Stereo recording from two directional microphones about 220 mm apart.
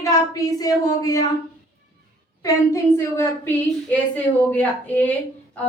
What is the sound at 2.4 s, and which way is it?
Speech, 15° left (ahead or behind).